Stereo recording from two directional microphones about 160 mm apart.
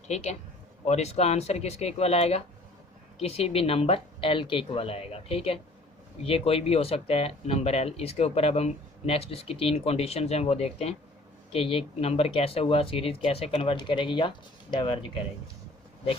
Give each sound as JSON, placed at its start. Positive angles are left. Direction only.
{"t": 0.1, "sound": "speech", "side_deg": 45}